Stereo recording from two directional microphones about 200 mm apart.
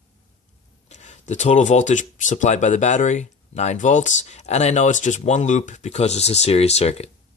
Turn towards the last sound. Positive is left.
turn(degrees=30)  # may be behind; listen again after turning